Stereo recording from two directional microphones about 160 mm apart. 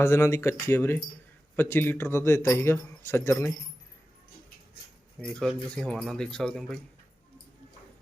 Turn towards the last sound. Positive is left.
turn(degrees=5)  # may be behind; listen again after turning